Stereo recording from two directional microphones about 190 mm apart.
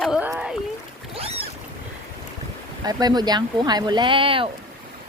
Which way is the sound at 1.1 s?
30° right (ahead or behind).